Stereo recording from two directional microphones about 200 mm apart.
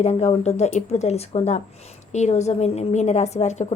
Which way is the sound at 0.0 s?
35° left (ahead or behind).